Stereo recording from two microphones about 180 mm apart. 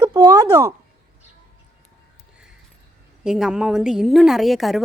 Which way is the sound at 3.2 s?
5° right (ahead or behind).